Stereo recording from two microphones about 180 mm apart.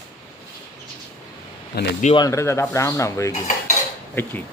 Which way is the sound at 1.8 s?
60° left (ahead or behind).